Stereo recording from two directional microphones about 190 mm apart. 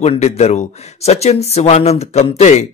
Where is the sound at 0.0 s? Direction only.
35° left (ahead or behind).